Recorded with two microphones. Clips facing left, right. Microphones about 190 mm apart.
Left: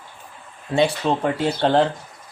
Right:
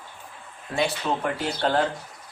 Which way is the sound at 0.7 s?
30° left (ahead or behind).